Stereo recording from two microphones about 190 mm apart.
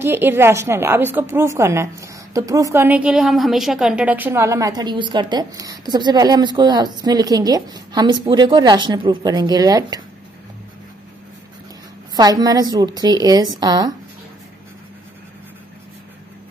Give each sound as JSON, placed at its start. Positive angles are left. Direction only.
{"t": 0.0, "sound": "a woman's voice", "side_deg": -10}
{"t": 12.2, "sound": "a woman's voice", "side_deg": -20}